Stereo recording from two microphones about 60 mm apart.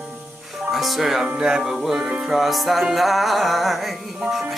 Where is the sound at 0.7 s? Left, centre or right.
Centre.